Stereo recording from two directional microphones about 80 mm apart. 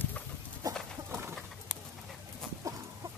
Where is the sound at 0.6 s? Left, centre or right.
Right.